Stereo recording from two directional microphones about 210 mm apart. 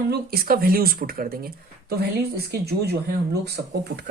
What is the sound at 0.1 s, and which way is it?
Speech, 45° right (ahead or behind).